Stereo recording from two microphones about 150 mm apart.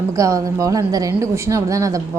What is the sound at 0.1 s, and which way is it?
A woman's voice, 20° right (ahead or behind).